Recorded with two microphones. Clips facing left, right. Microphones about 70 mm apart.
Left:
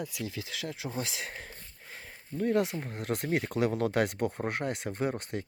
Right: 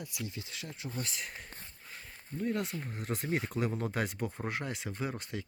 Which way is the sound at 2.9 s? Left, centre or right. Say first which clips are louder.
Left 3 dB; left.